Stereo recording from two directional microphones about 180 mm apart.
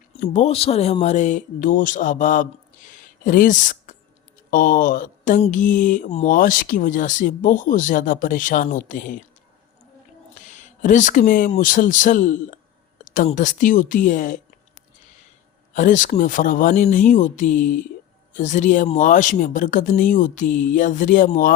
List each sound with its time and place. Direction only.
0.3 s speech: 35° left (ahead or behind)
2.9 s a sound: 50° left (ahead or behind)
4.5 s speech: 50° left (ahead or behind)
10.5 s speech: 45° left (ahead or behind)
15.7 s speech: 45° left (ahead or behind)